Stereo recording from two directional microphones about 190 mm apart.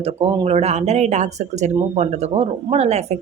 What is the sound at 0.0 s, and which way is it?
Speech, 30° right (ahead or behind).